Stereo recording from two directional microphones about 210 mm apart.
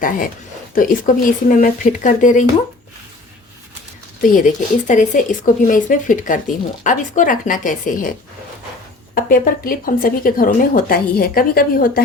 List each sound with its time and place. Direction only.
0.7 s speech: 40° left (ahead or behind)
4.2 s speech: 40° left (ahead or behind)
9.1 s speech: 45° left (ahead or behind)